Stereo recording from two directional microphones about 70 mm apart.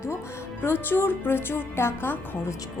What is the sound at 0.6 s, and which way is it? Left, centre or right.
Speech, left.